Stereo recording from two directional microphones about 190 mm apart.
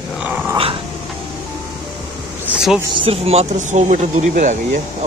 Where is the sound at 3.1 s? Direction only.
35° right (ahead or behind).